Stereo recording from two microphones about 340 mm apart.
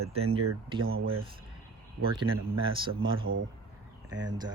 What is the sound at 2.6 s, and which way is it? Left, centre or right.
Speech, centre.